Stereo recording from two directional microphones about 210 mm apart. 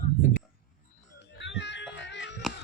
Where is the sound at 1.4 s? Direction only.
55° left (ahead or behind).